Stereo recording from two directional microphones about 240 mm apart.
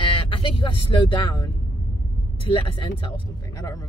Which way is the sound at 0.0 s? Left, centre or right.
Left.